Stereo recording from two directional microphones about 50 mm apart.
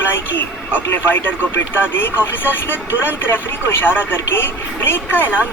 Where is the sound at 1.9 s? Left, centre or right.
Left.